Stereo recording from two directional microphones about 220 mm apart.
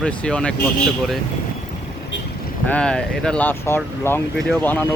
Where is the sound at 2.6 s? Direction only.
5° left (ahead or behind).